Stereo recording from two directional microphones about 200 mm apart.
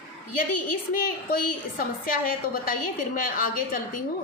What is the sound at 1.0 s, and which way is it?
A woman's voice, 45° left (ahead or behind).